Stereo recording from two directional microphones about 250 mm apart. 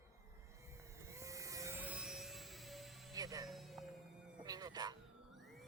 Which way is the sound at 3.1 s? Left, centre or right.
Centre.